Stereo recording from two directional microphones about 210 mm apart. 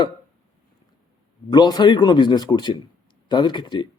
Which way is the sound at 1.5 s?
20° left (ahead or behind).